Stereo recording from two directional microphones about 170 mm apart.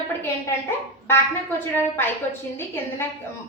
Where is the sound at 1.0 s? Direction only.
15° left (ahead or behind).